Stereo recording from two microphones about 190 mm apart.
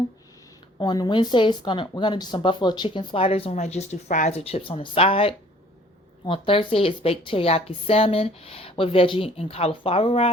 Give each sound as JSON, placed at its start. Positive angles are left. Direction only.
{"t": 0.8, "sound": "a woman's voice", "side_deg": 20}